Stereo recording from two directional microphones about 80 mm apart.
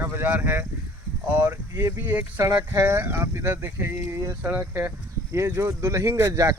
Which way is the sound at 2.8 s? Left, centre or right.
Right.